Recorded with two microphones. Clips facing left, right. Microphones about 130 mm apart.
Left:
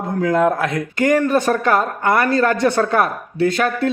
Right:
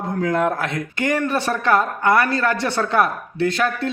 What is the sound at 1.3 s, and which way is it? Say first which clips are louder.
Speech: left 3 dB; 45° left (ahead or behind).